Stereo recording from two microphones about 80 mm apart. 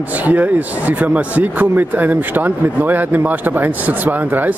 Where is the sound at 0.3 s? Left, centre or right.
Right.